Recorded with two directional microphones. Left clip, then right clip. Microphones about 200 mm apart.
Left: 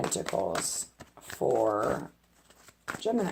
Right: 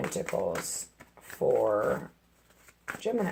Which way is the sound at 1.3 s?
25° left (ahead or behind).